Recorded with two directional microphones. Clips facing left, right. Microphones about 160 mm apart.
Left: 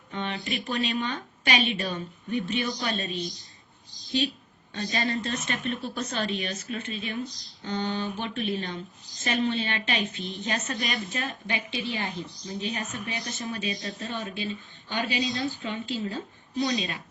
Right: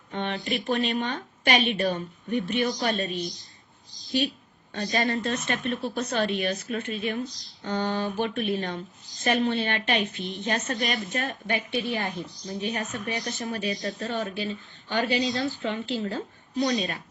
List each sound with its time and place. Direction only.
0.1 s a woman's voice: 50° right (ahead or behind)
4.7 s a woman's voice: 50° right (ahead or behind)
5.9 s speech: 35° right (ahead or behind)
6.2 s speech: 55° right (ahead or behind)
6.9 s a woman's voice: 45° right (ahead or behind)